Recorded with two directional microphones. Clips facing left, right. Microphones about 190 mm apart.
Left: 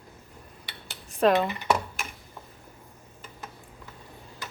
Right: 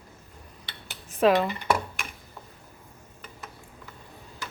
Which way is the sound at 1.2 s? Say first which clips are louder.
Right 1 dB; 5° left (ahead or behind).